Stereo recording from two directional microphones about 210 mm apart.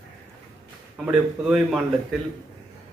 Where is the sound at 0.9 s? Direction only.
Centre (ahead or behind).